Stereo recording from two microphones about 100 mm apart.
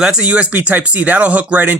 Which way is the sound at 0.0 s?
10° right (ahead or behind).